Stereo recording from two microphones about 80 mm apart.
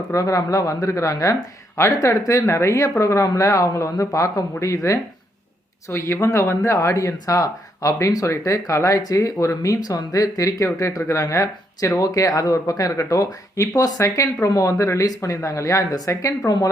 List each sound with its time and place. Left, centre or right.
0.1 s speech: left